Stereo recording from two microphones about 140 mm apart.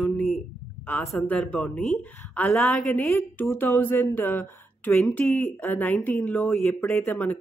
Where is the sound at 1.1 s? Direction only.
5° left (ahead or behind).